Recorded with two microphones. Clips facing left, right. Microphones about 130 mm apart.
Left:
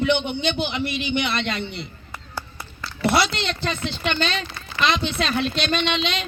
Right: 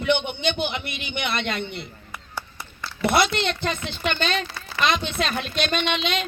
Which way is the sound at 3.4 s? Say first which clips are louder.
Even; 50° right (ahead or behind).